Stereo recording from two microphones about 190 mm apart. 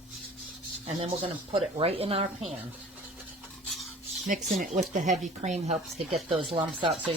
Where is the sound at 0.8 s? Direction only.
30° right (ahead or behind).